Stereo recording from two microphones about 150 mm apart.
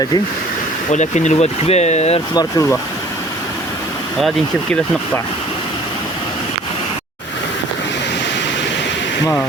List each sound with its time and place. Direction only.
0.9 s speech: 50° left (ahead or behind)
2.3 s speech: 25° left (ahead or behind)